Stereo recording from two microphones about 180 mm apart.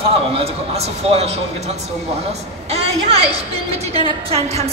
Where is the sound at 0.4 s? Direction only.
35° right (ahead or behind).